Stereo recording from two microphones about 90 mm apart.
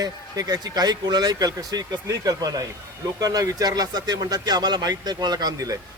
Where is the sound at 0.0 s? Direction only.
45° right (ahead or behind).